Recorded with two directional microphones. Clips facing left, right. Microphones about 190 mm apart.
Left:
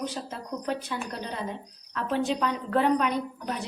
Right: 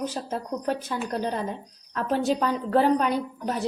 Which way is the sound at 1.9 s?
40° right (ahead or behind).